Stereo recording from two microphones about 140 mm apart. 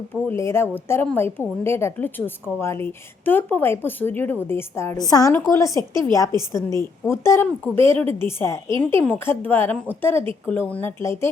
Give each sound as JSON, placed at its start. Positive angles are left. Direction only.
{"t": 0.1, "sound": "a woman's voice", "side_deg": 15}
{"t": 5.9, "sound": "a woman's voice", "side_deg": -30}
{"t": 6.5, "sound": "a woman's voice", "side_deg": 20}